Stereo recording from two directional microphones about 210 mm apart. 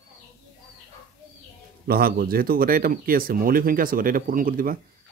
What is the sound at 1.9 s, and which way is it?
Speech, 45° right (ahead or behind).